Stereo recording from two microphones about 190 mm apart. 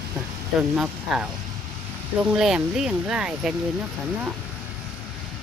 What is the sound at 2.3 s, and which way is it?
Speech, 5° right (ahead or behind).